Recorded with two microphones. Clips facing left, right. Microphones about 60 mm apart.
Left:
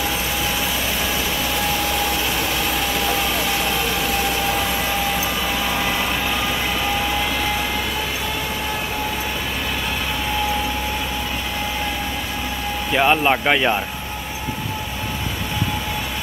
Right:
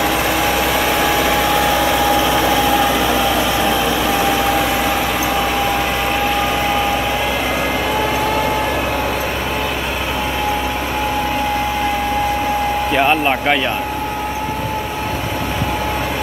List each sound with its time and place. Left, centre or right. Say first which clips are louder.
1.0 s vehicle: right 8 dB; right
12.9 s speech: even; centre